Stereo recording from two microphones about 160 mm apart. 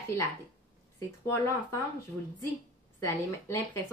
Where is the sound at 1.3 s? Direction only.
15° left (ahead or behind).